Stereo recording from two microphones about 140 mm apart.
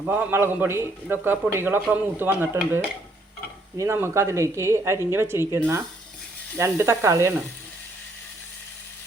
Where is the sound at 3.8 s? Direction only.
20° right (ahead or behind).